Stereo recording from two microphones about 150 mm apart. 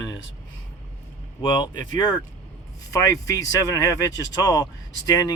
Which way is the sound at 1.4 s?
30° left (ahead or behind).